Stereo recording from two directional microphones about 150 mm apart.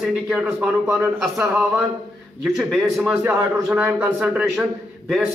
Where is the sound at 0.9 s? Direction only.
15° right (ahead or behind).